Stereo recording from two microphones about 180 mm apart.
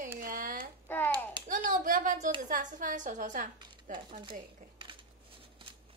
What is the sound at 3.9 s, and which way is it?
Speech, 30° right (ahead or behind).